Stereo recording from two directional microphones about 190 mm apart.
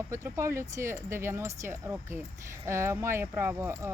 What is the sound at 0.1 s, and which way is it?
Speech, 15° right (ahead or behind).